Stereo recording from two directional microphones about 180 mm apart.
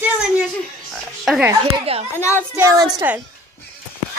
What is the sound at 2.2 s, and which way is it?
Speech, 15° left (ahead or behind).